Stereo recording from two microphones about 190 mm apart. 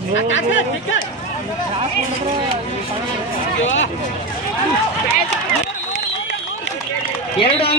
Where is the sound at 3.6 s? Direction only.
85° left.